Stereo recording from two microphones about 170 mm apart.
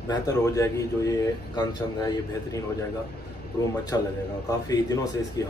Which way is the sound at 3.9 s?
20° left (ahead or behind).